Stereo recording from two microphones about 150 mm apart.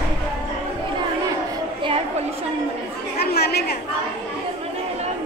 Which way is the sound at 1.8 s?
35° right (ahead or behind).